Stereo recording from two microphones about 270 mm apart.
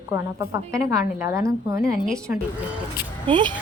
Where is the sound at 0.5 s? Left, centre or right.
Centre.